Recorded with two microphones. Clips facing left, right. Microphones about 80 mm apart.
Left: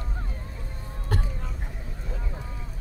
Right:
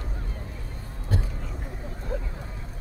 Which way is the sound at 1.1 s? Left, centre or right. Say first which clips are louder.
Even; left.